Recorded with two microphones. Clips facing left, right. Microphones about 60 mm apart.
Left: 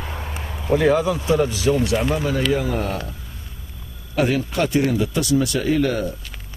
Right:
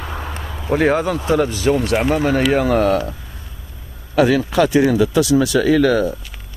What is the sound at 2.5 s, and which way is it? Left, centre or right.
Speech, right.